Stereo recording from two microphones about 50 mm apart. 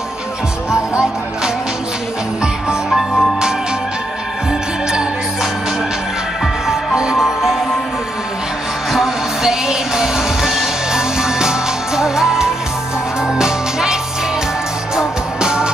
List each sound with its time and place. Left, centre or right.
0.7 s music: centre
2.9 s music: centre
6.4 s music: centre
8.9 s music: centre
15.0 s music: centre